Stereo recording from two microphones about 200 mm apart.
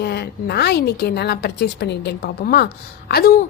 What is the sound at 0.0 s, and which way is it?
A woman's voice, 55° left (ahead or behind).